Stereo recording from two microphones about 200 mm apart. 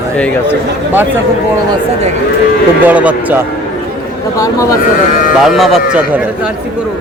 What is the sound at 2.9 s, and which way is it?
Speech, 5° right (ahead or behind).